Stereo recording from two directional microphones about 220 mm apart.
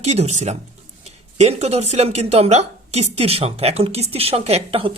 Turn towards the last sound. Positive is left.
turn(degrees=-25)  # may be behind; listen again after turning